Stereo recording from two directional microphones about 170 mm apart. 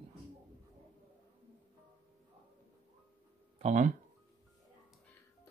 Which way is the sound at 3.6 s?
40° right (ahead or behind).